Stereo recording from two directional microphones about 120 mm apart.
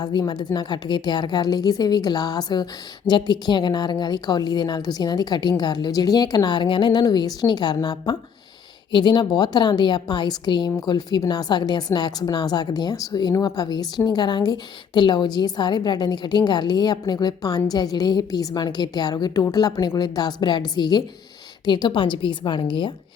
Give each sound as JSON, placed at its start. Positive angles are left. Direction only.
{"t": 0.0, "sound": "a woman's voice", "side_deg": 35}